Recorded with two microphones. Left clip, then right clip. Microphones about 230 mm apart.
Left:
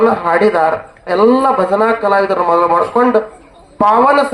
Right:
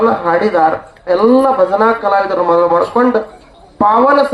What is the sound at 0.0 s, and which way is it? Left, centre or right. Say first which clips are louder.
Speech: left 1 dB; left.